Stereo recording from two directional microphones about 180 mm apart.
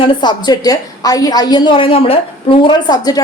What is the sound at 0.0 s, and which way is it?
A woman's voice, 25° left (ahead or behind).